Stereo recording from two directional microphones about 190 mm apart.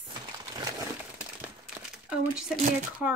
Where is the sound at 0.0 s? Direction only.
25° right (ahead or behind).